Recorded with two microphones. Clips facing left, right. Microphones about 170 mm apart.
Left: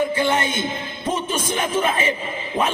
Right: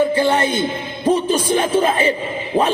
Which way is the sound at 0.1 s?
35° right (ahead or behind).